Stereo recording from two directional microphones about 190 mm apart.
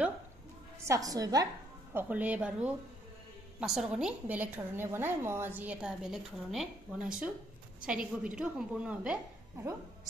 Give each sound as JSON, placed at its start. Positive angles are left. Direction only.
{"t": 0.8, "sound": "a woman's voice", "side_deg": -20}
{"t": 2.0, "sound": "a woman's voice", "side_deg": -10}